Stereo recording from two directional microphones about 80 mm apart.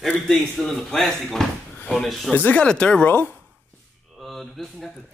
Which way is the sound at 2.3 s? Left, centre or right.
Centre.